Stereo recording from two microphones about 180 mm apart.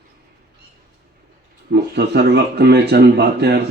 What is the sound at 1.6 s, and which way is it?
Speech, 65° right (ahead or behind).